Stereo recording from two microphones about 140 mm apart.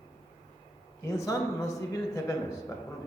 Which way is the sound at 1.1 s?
20° left (ahead or behind).